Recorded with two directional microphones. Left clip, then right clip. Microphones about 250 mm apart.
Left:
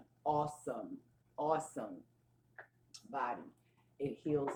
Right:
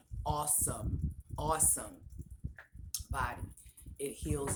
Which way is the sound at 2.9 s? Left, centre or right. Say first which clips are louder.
Right 2 dB; right.